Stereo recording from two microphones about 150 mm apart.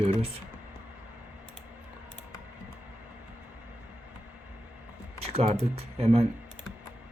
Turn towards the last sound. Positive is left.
turn(degrees=-40)  # may be behind; listen again after turning